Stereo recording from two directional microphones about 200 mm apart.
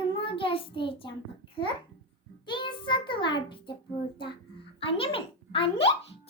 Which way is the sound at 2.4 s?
25° left (ahead or behind).